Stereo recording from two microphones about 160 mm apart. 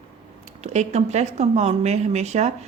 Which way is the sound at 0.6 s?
40° right (ahead or behind).